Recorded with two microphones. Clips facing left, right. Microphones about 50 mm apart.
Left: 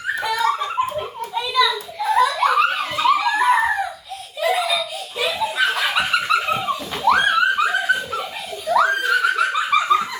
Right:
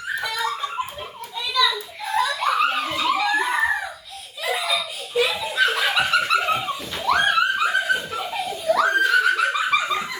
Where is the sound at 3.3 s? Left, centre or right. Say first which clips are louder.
Left 5 dB; centre.